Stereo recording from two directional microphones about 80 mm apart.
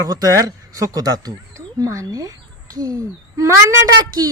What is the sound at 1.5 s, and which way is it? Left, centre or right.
Speech, right.